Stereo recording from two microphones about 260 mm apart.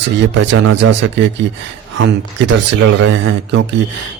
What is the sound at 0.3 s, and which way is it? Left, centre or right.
Speech, right.